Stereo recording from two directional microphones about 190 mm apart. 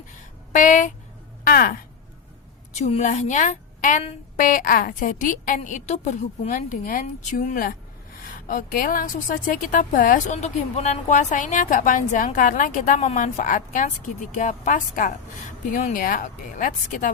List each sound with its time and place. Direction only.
0.5 s a woman's voice: 45° left (ahead or behind)
2.7 s a woman's voice: 35° left (ahead or behind)